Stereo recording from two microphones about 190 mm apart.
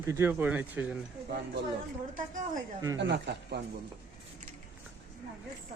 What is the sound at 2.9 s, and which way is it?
Speech, 65° right (ahead or behind).